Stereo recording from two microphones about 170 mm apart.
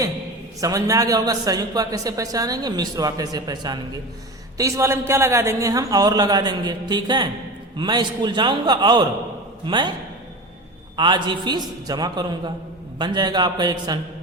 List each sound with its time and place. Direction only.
0.6 s a man's voice: 20° right (ahead or behind)
10.9 s a man's voice: 25° right (ahead or behind)